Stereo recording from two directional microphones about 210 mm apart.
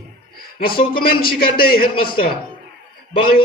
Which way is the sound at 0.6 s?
45° left (ahead or behind).